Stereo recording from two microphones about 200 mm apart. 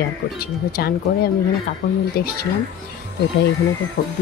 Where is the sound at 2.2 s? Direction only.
50° left (ahead or behind).